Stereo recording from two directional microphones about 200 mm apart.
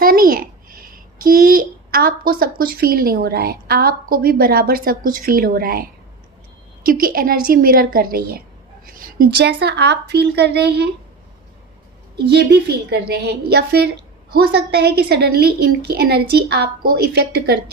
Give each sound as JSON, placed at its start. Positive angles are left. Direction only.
{"t": 0.0, "sound": "a child's voice", "side_deg": -45}
{"t": 12.3, "sound": "a woman's voice", "side_deg": -55}